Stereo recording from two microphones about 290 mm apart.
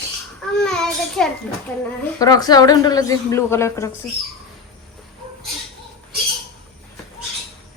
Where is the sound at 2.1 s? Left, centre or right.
Centre.